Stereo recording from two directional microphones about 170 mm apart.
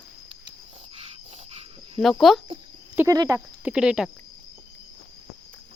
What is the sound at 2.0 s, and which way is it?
Speech, centre (ahead or behind).